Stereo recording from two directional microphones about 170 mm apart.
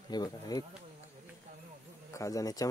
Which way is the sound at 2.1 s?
20° left (ahead or behind).